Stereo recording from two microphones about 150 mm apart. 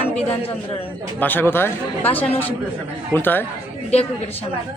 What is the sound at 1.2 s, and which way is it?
Speech, 10° left (ahead or behind).